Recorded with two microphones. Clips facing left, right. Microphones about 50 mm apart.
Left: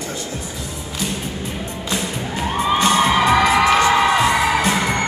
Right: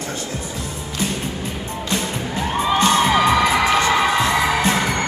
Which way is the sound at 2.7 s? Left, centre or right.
Centre.